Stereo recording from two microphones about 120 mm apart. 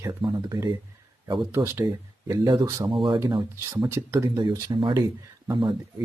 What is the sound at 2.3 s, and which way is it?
Speech, 30° right (ahead or behind).